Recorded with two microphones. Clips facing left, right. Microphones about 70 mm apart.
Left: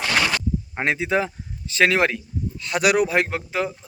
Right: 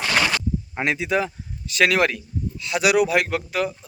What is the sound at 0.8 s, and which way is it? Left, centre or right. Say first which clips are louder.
Speech: left 1 dB; left.